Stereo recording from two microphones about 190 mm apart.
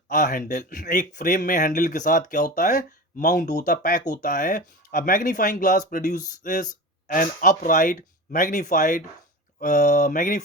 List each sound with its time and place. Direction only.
0.1 s speech: 45° left (ahead or behind)